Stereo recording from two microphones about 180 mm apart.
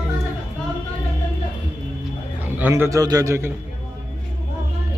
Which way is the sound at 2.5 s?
10° right (ahead or behind).